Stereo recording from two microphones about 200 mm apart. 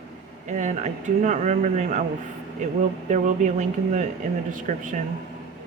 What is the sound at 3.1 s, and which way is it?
Speech, 40° right (ahead or behind).